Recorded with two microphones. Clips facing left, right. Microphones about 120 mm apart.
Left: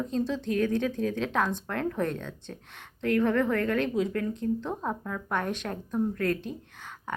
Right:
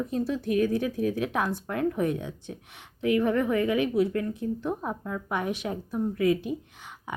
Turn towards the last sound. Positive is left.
turn(degrees=-10)  # may be behind; listen again after turning